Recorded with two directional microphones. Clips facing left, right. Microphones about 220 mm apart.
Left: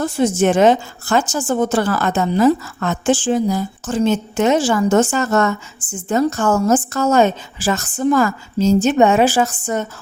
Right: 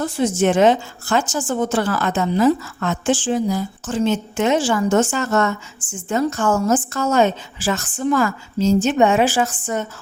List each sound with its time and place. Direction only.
0.2 s a woman's voice: 45° left (ahead or behind)